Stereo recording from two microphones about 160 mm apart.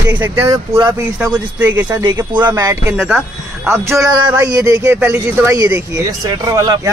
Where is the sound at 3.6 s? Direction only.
15° right (ahead or behind).